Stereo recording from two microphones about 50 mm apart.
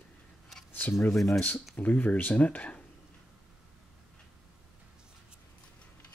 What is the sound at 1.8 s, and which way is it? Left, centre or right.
Speech, left.